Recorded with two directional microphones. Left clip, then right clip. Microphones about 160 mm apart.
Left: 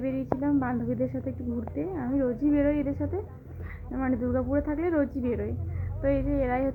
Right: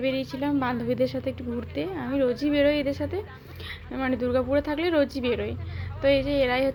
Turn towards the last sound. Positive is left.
turn(degrees=-25)  # may be behind; listen again after turning